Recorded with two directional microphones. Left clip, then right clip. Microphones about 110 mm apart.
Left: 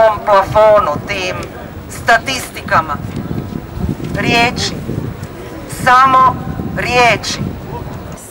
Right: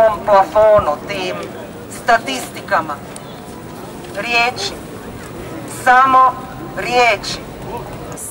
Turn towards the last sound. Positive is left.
turn(degrees=20)  # may be behind; listen again after turning